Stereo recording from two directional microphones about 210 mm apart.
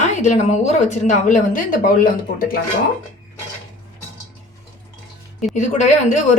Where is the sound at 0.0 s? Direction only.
35° left (ahead or behind).